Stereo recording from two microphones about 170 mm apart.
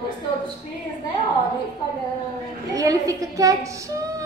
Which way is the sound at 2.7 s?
20° right (ahead or behind).